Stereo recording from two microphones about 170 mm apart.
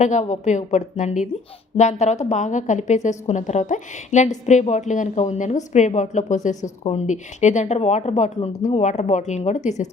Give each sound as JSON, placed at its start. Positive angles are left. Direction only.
{"t": 0.0, "sound": "a woman's voice", "side_deg": 40}